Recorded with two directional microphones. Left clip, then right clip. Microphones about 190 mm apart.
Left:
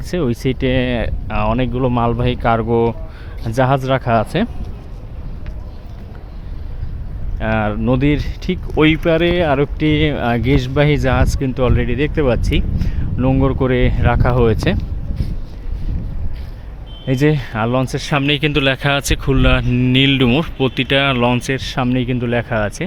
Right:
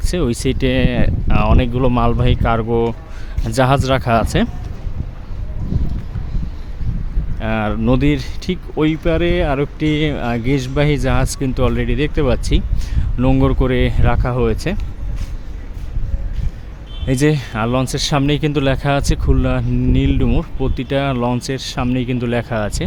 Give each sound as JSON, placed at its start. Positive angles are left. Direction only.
{"t": 0.1, "sound": "speech", "side_deg": -20}
{"t": 3.4, "sound": "speech", "side_deg": -25}
{"t": 7.3, "sound": "speech", "side_deg": -15}
{"t": 8.7, "sound": "speech", "side_deg": 0}
{"t": 17.1, "sound": "speech", "side_deg": -25}
{"t": 18.1, "sound": "speech", "side_deg": -10}